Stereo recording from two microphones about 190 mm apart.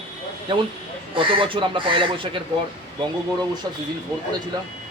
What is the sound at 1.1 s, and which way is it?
Speech, 25° right (ahead or behind).